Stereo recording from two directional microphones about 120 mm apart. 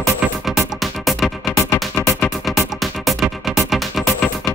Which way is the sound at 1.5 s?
25° left (ahead or behind).